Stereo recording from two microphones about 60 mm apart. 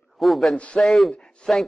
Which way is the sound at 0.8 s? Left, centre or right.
Centre.